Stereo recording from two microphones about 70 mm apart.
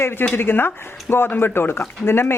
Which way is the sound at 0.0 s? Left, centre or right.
Left.